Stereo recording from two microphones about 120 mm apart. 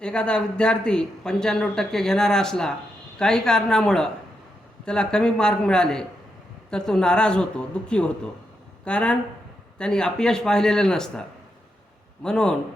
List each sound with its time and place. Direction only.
0.0 s a man's voice: 5° left (ahead or behind)